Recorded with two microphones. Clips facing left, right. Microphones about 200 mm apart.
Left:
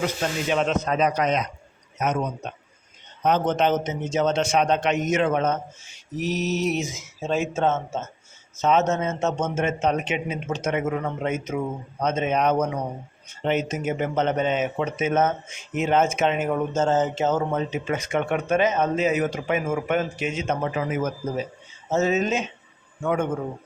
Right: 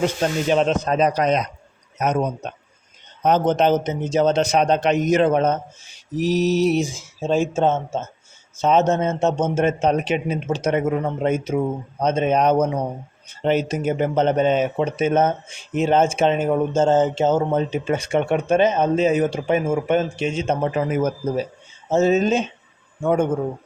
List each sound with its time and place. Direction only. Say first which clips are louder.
0.0 s speech: right 5 dB; 35° right (ahead or behind)
3.2 s speech: right 4 dB; 35° right (ahead or behind)